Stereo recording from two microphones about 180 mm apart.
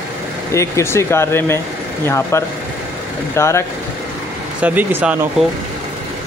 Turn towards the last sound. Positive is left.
turn(degrees=-5)  # may be behind; listen again after turning